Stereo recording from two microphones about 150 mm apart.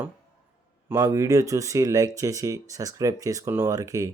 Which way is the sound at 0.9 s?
20° right (ahead or behind).